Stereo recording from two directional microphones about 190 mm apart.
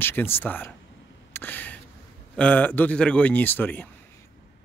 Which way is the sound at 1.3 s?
10° left (ahead or behind).